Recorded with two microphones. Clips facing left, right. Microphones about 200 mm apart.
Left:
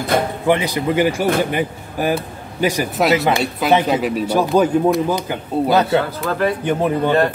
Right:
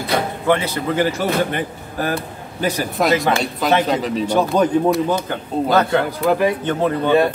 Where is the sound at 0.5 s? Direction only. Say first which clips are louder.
Left 1 dB; 15° left (ahead or behind).